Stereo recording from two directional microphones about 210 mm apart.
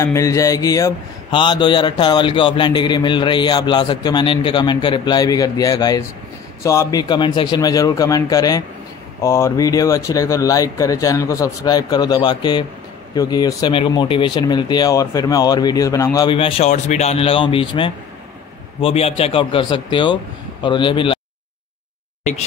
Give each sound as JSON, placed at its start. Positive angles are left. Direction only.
{"t": 0.0, "sound": "a man's voice", "side_deg": 15}